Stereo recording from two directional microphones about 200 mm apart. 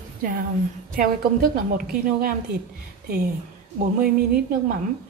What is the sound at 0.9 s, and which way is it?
A woman's voice, 45° right (ahead or behind).